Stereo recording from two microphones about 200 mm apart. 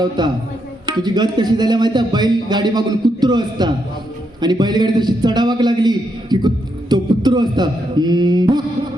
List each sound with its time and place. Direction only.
0.2 s speech: 20° right (ahead or behind)